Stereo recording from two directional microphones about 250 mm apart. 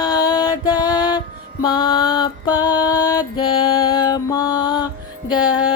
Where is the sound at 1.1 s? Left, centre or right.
Centre.